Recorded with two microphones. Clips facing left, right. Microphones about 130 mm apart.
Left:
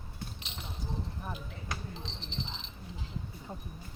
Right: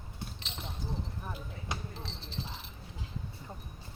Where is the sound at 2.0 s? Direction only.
20° left (ahead or behind).